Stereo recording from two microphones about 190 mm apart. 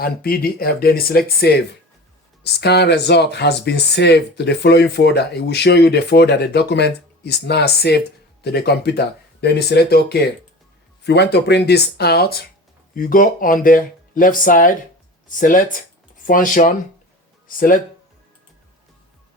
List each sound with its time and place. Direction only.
0.0 s speech: 50° left (ahead or behind)